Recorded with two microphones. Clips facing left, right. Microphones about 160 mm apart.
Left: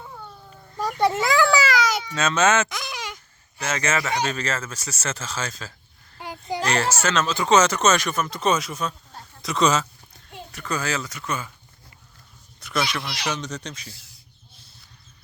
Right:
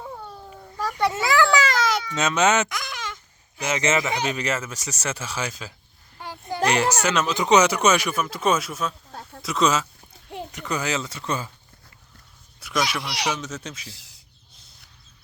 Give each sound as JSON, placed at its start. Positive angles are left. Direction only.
{"t": 0.8, "sound": "a sound", "side_deg": 20}
{"t": 2.1, "sound": "speech", "side_deg": -15}
{"t": 2.6, "sound": "a sound", "side_deg": 20}
{"t": 3.6, "sound": "speech", "side_deg": -20}
{"t": 10.2, "sound": "a child's voice", "side_deg": -20}
{"t": 12.5, "sound": "speech", "side_deg": -10}